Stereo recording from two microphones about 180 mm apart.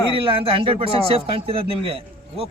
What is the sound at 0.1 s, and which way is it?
A man's voice, 30° right (ahead or behind).